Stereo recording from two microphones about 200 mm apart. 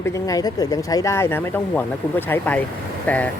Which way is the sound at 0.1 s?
20° left (ahead or behind).